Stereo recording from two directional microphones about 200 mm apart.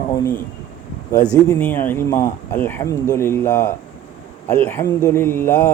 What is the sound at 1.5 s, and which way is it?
Speech, 10° left (ahead or behind).